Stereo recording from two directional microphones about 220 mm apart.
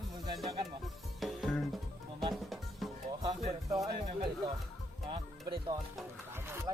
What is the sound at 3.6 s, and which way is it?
Music, 15° right (ahead or behind).